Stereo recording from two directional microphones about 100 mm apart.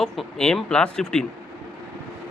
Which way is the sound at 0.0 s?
5° left (ahead or behind).